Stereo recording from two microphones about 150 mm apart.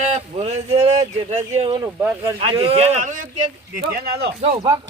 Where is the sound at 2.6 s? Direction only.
40° right (ahead or behind); by 3.3 s 60° right (ahead or behind).